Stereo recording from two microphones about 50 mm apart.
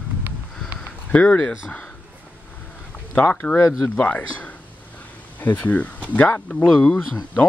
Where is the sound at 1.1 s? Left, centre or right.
Left.